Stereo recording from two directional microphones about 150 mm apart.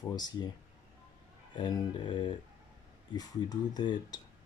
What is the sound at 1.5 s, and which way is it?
Speech, 30° left (ahead or behind).